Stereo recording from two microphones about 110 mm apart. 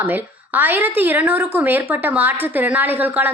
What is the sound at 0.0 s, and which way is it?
A woman's voice, 15° right (ahead or behind).